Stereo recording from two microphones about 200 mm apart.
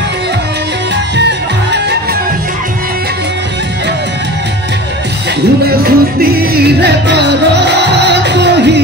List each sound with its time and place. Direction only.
1.1 s music: 60° right (ahead or behind)
5.6 s music: 50° right (ahead or behind)